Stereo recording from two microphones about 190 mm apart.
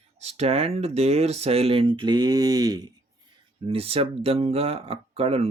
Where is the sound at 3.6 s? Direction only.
30° right (ahead or behind).